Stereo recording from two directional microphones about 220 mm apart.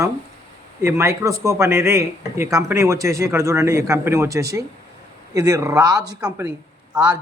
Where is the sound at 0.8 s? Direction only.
10° right (ahead or behind).